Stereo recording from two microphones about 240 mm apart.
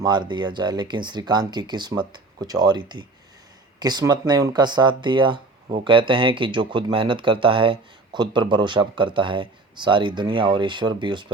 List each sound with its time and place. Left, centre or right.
0.0 s speech: centre